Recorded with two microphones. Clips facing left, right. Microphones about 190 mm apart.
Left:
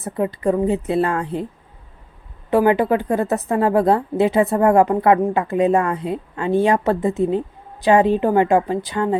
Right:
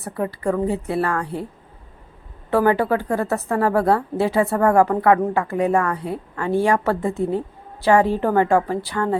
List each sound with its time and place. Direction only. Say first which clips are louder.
0.0 s a woman's voice: left 3 dB; 20° left (ahead or behind)
2.5 s a woman's voice: left 2 dB; 15° left (ahead or behind)